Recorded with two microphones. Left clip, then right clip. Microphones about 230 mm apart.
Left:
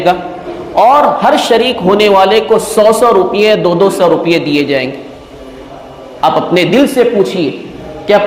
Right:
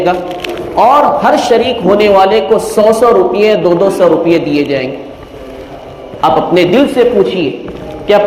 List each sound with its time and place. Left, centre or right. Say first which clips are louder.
0.8 s a man's voice: even; left
6.2 s a man's voice: right 1 dB; left